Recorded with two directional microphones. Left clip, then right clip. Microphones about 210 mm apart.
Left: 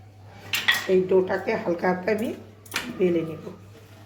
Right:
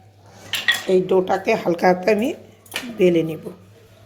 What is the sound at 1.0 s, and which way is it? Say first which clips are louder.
A woman's voice: right 4 dB; 40° right (ahead or behind).